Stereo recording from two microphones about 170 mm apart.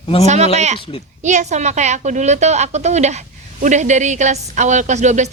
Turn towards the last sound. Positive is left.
turn(degrees=-45)  # may be behind; listen again after turning